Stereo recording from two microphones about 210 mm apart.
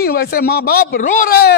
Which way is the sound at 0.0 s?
45° left (ahead or behind).